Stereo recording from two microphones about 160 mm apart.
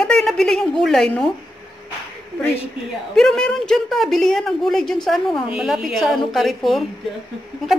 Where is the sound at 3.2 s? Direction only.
5° left (ahead or behind).